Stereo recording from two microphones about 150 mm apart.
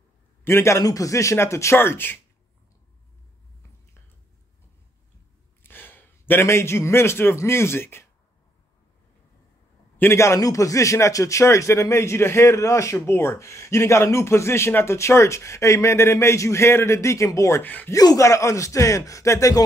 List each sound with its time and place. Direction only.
0.4 s a man's voice: 15° left (ahead or behind)
5.6 s a man's voice: 15° left (ahead or behind)
9.9 s a man's voice: 15° left (ahead or behind)